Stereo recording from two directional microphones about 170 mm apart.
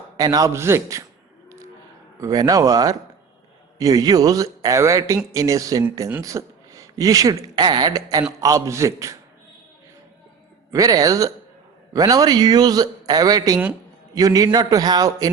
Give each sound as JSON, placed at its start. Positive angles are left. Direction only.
{"t": 0.2, "sound": "speech", "side_deg": -20}
{"t": 2.2, "sound": "a man's voice", "side_deg": -20}
{"t": 10.7, "sound": "speech", "side_deg": -20}